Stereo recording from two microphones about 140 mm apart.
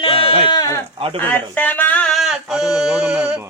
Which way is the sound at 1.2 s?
10° left (ahead or behind).